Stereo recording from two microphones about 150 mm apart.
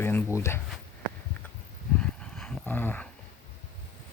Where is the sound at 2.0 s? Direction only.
10° left (ahead or behind).